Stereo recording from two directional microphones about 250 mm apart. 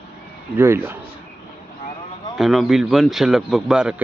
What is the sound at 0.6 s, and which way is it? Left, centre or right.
Speech, centre.